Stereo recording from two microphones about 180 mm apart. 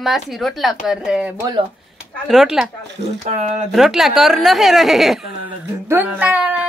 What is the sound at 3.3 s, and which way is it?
Speech, 40° right (ahead or behind).